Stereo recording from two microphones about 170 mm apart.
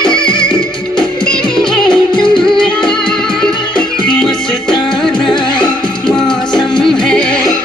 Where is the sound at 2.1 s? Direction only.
30° left (ahead or behind).